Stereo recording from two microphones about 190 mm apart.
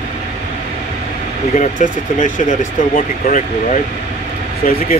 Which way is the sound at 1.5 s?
40° left (ahead or behind).